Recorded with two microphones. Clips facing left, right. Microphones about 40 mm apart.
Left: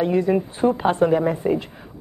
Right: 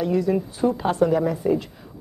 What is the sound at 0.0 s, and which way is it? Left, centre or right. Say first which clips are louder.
Speech: left 2 dB; left.